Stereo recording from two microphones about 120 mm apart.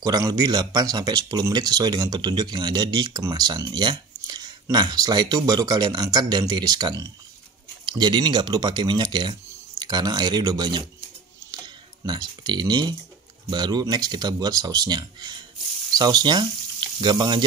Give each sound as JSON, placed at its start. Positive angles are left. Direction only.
{"t": 0.0, "sound": "speech", "side_deg": -30}
{"t": 11.5, "sound": "typing", "side_deg": -35}
{"t": 13.5, "sound": "speech", "side_deg": -35}